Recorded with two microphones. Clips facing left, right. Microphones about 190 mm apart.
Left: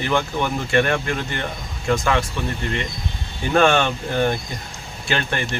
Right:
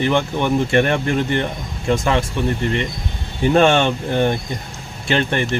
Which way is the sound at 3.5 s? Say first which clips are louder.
Right 2 dB; 25° right (ahead or behind).